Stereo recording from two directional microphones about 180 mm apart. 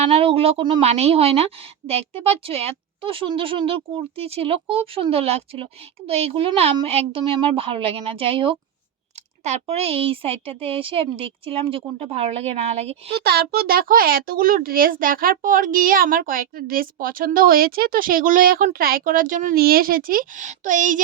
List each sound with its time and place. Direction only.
0.0 s a woman's voice: 35° right (ahead or behind)
13.2 s a child's voice: 60° right (ahead or behind)